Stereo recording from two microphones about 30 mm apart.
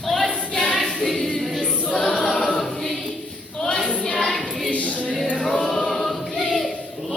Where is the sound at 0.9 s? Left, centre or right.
Centre.